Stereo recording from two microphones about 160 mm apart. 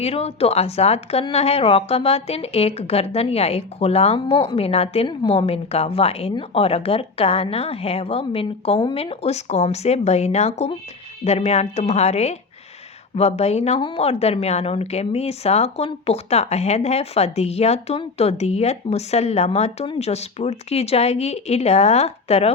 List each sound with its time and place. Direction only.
0.0 s a woman's voice: 40° left (ahead or behind)